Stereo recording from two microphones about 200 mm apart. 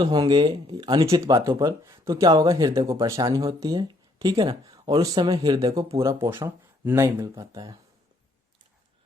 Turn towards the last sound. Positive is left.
turn(degrees=-20)  # may be behind; listen again after turning